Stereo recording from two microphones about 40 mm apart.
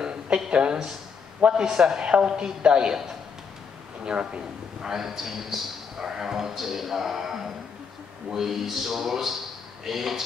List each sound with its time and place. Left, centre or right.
0.0 s a sound: right
0.5 s a woman's voice: right
1.5 s a man's voice: centre
4.0 s a woman's voice: right
4.8 s a man's voice: centre